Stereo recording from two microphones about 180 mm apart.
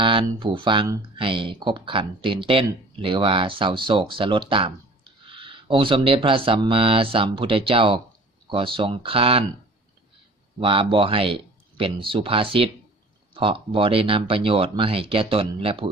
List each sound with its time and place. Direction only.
0.0 s speech: 25° right (ahead or behind)
10.6 s speech: 30° right (ahead or behind)